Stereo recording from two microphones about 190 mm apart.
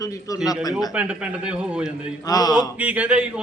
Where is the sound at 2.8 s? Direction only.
5° right (ahead or behind).